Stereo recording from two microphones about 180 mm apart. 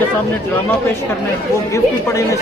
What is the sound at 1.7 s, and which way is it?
Speech, 15° left (ahead or behind).